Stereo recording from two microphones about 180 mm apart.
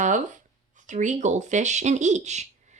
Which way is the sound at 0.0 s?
45° right (ahead or behind).